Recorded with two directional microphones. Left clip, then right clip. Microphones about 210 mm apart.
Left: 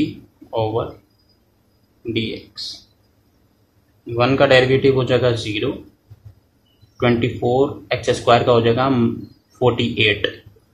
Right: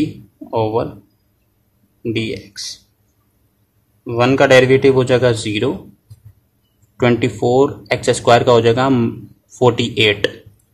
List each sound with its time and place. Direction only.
0.5 s speech: 20° right (ahead or behind)
4.0 s speech: 20° right (ahead or behind)
7.0 s speech: 20° right (ahead or behind)